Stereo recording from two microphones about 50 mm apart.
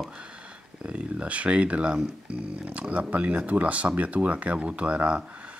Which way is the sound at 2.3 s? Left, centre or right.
Right.